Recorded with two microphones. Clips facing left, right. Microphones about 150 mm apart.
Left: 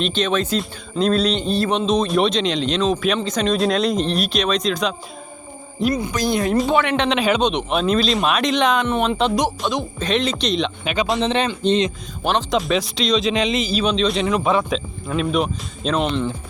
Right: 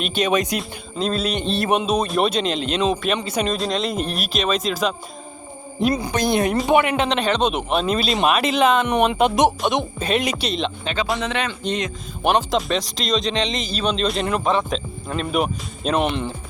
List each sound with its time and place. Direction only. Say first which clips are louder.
0.0 s speech: even; 10° right (ahead or behind)
0.6 s speech: left 4 dB; centre (ahead or behind)
5.8 s speech: even; 30° right (ahead or behind)
6.2 s speech: right 1 dB; 20° right (ahead or behind)
6.8 s speech: left 2 dB; 5° right (ahead or behind)
10.8 s speech: left 5 dB; 20° left (ahead or behind)
12.5 s speech: left 2 dB; centre (ahead or behind)